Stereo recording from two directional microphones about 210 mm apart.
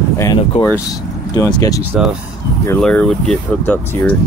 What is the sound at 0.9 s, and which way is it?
Speech, 15° left (ahead or behind).